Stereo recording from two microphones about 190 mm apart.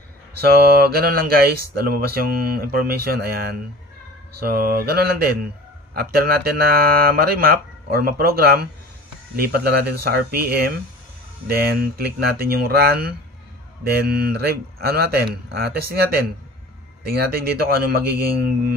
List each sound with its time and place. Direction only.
0.4 s speech: 55° right (ahead or behind)